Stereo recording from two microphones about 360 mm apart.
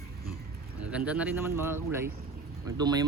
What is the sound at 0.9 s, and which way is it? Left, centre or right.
Speech, centre.